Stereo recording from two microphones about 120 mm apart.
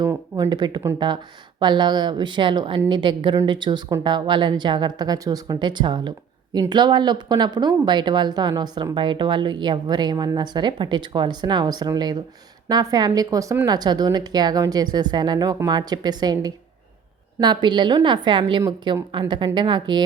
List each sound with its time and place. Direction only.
0.3 s speech: 35° right (ahead or behind)